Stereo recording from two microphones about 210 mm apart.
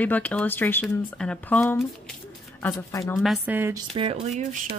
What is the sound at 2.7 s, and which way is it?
Speech, 15° left (ahead or behind).